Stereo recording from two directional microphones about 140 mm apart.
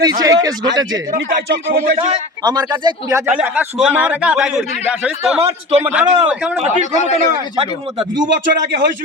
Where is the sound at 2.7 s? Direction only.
30° right (ahead or behind).